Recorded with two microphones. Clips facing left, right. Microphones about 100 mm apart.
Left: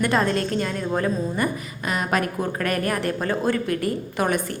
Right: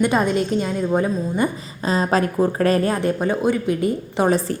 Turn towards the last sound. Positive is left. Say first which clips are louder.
# right 5 dB
turn(degrees=-30)  # may be behind; listen again after turning